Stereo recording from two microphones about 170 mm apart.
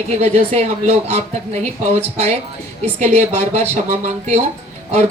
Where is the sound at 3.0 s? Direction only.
40° right (ahead or behind).